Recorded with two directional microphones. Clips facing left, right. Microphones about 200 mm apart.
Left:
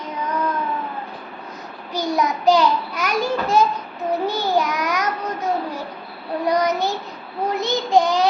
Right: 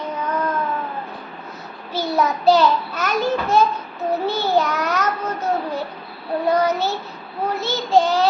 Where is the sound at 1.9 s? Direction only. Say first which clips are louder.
Right 1 dB; 15° left (ahead or behind).